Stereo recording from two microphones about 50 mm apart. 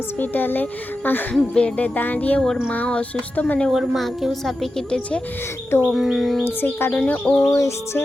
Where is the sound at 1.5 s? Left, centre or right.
Centre.